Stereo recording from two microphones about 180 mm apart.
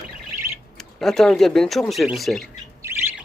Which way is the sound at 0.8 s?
Centre (ahead or behind).